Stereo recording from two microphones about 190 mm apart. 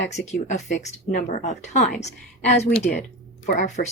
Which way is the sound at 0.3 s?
35° left (ahead or behind).